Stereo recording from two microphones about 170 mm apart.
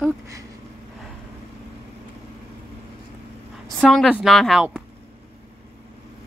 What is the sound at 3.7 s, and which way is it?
A woman's voice, centre (ahead or behind).